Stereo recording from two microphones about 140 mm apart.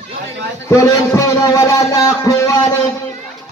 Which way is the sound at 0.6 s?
20° left (ahead or behind).